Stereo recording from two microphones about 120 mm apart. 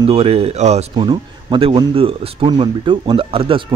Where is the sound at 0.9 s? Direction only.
45° right (ahead or behind).